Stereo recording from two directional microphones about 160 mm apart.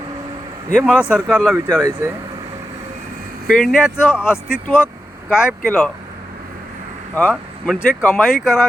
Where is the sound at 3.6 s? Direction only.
5° right (ahead or behind).